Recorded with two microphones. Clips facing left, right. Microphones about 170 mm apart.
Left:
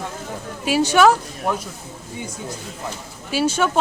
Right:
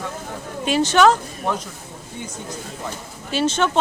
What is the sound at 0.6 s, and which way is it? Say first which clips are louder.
Speech: even; 10° left (ahead or behind).